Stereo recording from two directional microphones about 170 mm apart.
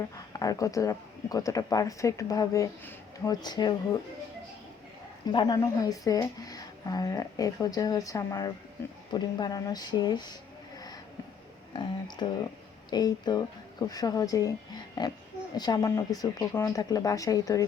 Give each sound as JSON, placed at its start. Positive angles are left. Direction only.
{"t": 0.3, "sound": "speech", "side_deg": 20}
{"t": 5.3, "sound": "speech", "side_deg": 25}
{"t": 11.7, "sound": "speech", "side_deg": 25}